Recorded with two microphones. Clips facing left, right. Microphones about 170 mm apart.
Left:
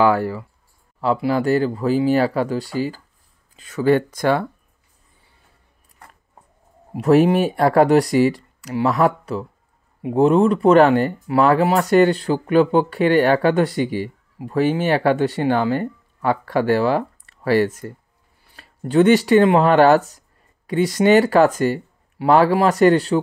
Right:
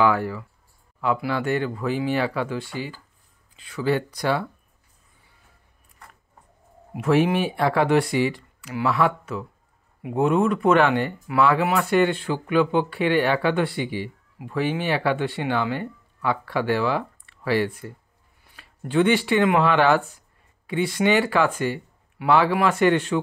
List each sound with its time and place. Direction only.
0.0 s speech: 35° left (ahead or behind)
7.0 s speech: 40° left (ahead or behind)